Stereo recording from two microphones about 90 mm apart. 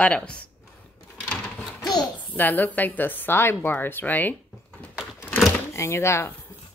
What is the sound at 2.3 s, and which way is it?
Speech, 20° left (ahead or behind).